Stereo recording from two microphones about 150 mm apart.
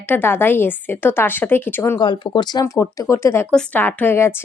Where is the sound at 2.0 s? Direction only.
30° left (ahead or behind).